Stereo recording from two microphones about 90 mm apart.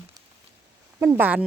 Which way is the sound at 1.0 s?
20° right (ahead or behind).